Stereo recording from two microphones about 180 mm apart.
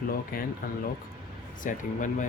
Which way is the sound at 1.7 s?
45° left (ahead or behind).